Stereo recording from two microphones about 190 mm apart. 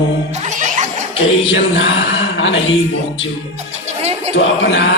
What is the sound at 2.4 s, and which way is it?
Speech, 90° left.